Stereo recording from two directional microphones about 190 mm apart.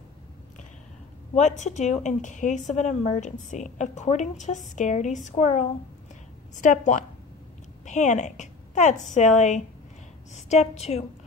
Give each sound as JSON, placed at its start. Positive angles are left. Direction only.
{"t": 1.3, "sound": "a woman's voice", "side_deg": 40}